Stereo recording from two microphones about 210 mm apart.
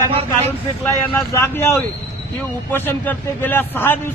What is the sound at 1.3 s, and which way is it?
A man's voice, 10° left (ahead or behind).